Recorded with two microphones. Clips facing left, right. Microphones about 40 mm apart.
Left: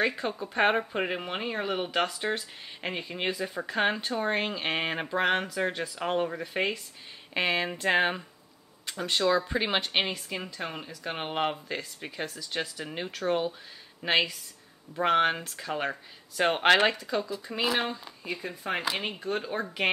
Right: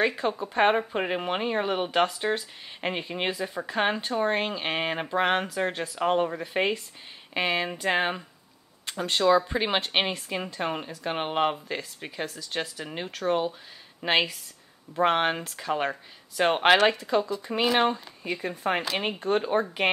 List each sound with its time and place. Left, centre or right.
0.0 s a woman's voice: centre
2.0 s speech: centre
2.8 s a woman's voice: centre
3.3 s a woman's voice: centre
7.3 s a woman's voice: centre
17.7 s speech: right
18.9 s speech: centre
19.3 s speech: right